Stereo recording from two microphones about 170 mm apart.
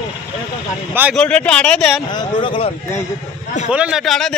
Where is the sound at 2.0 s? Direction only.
25° left (ahead or behind).